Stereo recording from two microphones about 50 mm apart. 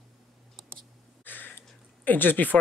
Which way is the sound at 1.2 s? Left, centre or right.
Left.